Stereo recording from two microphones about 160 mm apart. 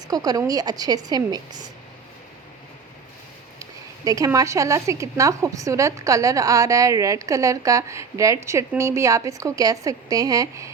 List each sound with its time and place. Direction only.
0.1 s speech: 20° right (ahead or behind)
3.6 s speech: 20° right (ahead or behind)